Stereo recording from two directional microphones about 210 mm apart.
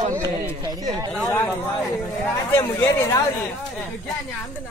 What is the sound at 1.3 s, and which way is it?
Speech, 10° left (ahead or behind).